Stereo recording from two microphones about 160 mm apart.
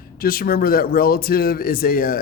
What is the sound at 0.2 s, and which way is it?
A man's voice, 65° left (ahead or behind).